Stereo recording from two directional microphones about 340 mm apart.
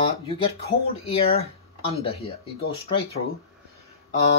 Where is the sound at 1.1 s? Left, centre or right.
Centre.